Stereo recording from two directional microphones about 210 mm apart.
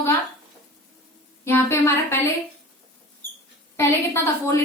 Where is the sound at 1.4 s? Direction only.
10° left (ahead or behind).